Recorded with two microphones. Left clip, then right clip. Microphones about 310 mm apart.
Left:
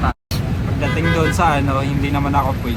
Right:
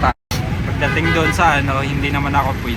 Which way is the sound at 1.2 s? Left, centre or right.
Centre.